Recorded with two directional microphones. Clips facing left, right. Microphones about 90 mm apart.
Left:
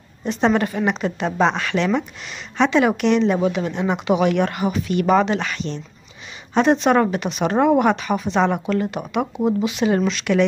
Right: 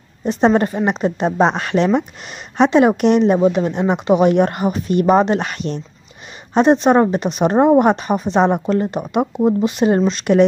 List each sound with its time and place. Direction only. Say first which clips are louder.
0.2 s a woman's voice: right 4 dB; 40° right (ahead or behind)
6.5 s a woman's voice: right 4 dB; 40° right (ahead or behind)